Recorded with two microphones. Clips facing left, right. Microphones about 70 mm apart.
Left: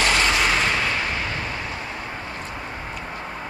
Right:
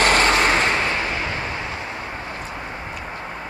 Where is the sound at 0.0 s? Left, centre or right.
Right.